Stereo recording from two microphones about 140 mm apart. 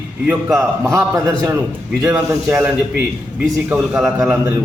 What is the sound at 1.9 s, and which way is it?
A man's voice, 10° right (ahead or behind).